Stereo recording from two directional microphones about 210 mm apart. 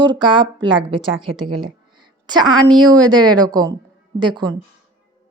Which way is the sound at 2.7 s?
20° right (ahead or behind).